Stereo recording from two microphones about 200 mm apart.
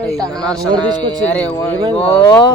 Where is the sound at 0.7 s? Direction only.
20° right (ahead or behind).